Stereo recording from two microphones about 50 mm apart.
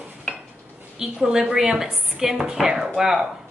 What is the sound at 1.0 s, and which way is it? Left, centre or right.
Speech, centre.